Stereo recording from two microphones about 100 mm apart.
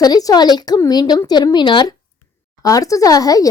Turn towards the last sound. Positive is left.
turn(degrees=35)  # may be behind; listen again after turning